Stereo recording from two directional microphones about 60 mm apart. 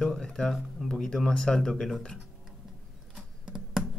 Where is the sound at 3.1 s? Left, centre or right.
Centre.